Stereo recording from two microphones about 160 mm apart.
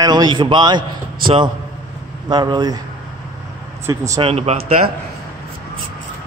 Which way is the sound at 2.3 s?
25° right (ahead or behind).